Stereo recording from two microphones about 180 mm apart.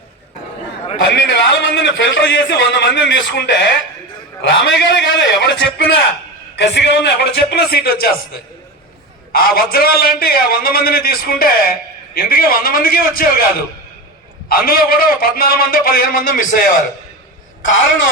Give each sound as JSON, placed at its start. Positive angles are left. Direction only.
{"t": 1.0, "sound": "a man's voice", "side_deg": 85}
{"t": 6.6, "sound": "a man's voice", "side_deg": 70}
{"t": 14.5, "sound": "a man's voice", "side_deg": 55}
{"t": 17.6, "sound": "speech", "side_deg": 90}